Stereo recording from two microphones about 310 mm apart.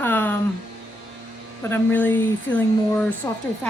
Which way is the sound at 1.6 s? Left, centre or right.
Centre.